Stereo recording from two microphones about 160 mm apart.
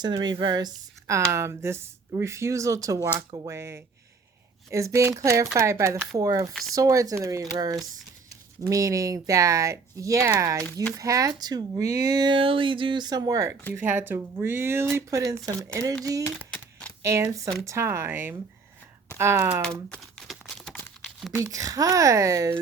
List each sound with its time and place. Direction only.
0.0 s speech: 25° right (ahead or behind)
6.5 s speech: centre (ahead or behind)
6.7 s speech: 20° right (ahead or behind)
16.2 s a sound: 10° left (ahead or behind)
17.0 s speech: 15° right (ahead or behind)
19.6 s crumpling: 5° left (ahead or behind)
21.0 s a sound: centre (ahead or behind)
21.3 s speech: 20° right (ahead or behind)